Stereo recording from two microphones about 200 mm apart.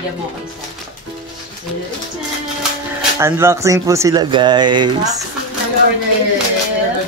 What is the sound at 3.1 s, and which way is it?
Speech, 15° right (ahead or behind).